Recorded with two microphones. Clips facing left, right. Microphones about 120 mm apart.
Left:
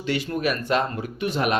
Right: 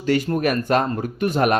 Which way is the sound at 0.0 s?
45° right (ahead or behind).